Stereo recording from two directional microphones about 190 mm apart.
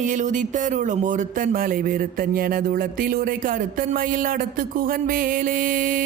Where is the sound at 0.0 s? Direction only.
40° right (ahead or behind).